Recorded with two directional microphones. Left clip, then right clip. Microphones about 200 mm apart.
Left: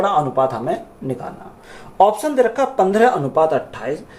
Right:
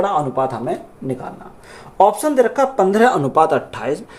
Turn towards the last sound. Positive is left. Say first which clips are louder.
# right 1 dB
turn(degrees=-50)  # may be behind; listen again after turning